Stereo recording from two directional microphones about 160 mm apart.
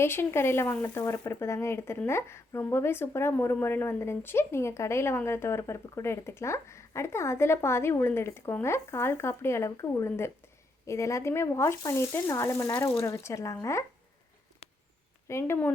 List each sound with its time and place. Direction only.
0.0 s speech: 15° left (ahead or behind)
15.3 s speech: 15° left (ahead or behind)